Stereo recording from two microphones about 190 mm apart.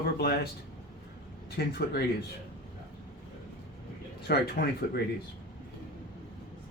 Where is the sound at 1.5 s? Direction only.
55° left (ahead or behind).